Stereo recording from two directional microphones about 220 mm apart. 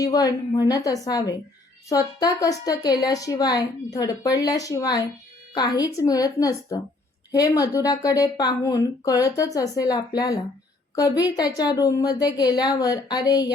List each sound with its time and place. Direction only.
0.0 s a woman's voice: 15° left (ahead or behind)